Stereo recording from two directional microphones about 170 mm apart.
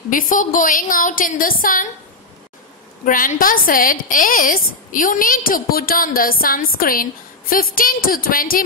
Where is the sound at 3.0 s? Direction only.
55° left (ahead or behind).